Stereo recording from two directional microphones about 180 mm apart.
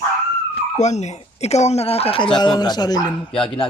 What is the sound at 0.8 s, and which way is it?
Speech, 40° left (ahead or behind).